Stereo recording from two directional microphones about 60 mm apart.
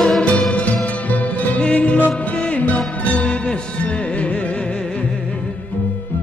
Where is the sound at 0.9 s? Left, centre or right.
Left.